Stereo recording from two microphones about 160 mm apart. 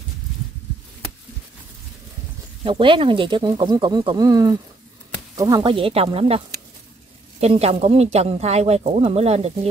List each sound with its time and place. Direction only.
2.6 s a woman's voice: 30° right (ahead or behind)